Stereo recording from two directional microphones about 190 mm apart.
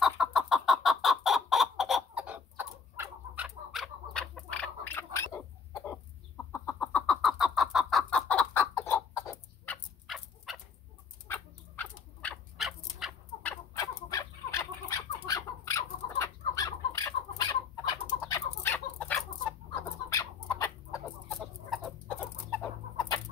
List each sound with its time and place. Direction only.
0.0 s chicken: centre (ahead or behind); by 9.8 s 15° left (ahead or behind)
10.0 s dog: centre (ahead or behind)
11.2 s a sound: 10° left (ahead or behind)
13.7 s chicken: 15° left (ahead or behind)
18.2 s chicken: 15° left (ahead or behind)
21.3 s chicken: centre (ahead or behind)
22.0 s chicken: 10° left (ahead or behind)